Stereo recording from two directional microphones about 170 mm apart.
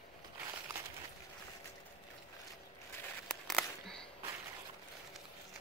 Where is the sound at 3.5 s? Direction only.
5° left (ahead or behind).